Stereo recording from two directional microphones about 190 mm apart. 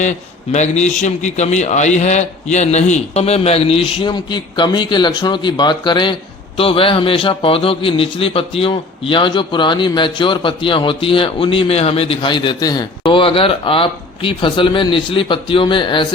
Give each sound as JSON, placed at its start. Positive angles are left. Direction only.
{"t": 0.0, "sound": "a man's voice", "side_deg": 40}